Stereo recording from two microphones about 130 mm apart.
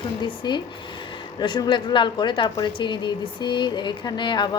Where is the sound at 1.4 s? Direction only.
35° left (ahead or behind).